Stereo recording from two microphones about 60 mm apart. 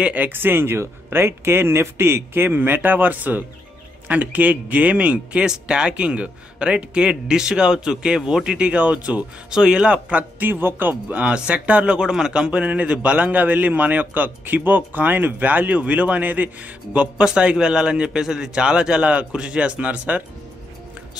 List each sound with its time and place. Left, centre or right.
0.0 s a man's voice: right